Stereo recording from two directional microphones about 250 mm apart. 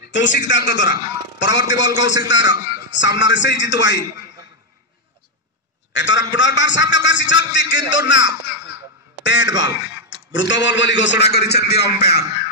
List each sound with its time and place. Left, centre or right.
0.1 s a man's voice: left
5.9 s a man's voice: left